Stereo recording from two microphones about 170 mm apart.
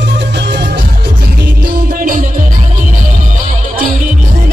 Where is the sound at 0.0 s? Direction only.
90° right.